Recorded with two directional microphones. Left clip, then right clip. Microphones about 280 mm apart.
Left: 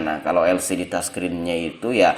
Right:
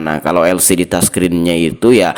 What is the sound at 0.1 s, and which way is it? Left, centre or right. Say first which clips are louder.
Speech: right 7 dB; right.